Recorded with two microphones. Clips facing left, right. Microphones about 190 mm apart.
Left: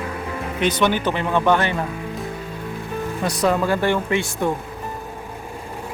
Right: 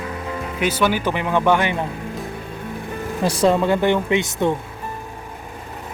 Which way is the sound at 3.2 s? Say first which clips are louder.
Right 3 dB; 30° right (ahead or behind).